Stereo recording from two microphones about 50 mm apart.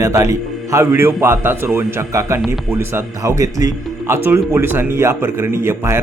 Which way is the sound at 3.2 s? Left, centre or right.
Right.